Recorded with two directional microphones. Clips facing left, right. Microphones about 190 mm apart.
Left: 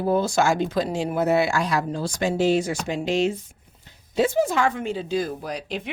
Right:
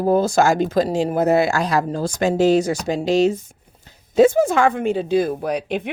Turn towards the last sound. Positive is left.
turn(degrees=-60)  # may be behind; listen again after turning